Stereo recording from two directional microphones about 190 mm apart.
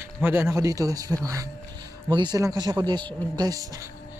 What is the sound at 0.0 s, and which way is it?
Speech, 10° right (ahead or behind).